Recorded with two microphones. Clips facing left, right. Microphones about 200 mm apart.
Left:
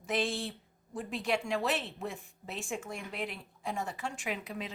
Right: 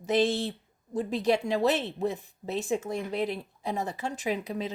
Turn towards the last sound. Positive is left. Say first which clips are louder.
# right 7 dB
turn(degrees=-35)  # may be behind; listen again after turning